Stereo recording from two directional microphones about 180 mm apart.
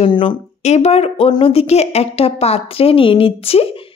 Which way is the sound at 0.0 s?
30° left (ahead or behind).